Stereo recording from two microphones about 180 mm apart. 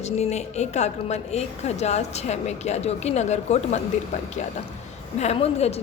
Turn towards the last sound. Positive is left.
turn(degrees=35)  # may be behind; listen again after turning